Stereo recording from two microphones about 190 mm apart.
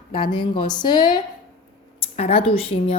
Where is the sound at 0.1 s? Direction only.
25° left (ahead or behind).